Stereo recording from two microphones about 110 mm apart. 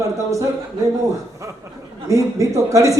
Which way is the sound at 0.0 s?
30° right (ahead or behind).